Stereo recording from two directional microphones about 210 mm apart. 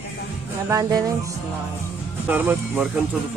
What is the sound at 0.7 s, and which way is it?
Speech, 15° right (ahead or behind).